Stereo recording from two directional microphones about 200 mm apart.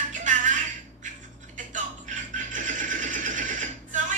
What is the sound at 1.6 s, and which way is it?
Music, 40° right (ahead or behind).